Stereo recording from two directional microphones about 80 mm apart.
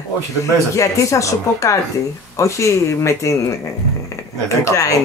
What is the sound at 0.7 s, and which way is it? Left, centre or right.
Speech, left.